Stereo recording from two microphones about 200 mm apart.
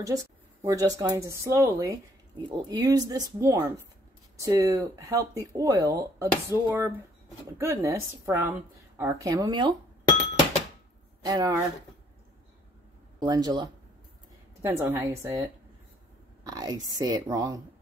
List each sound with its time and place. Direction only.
0.0 s speech: 15° right (ahead or behind)
11.2 s speech: 15° right (ahead or behind)
13.2 s a woman's voice: 20° right (ahead or behind)